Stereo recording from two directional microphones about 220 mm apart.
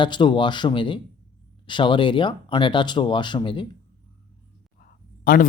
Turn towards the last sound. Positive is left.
turn(degrees=40)  # may be behind; listen again after turning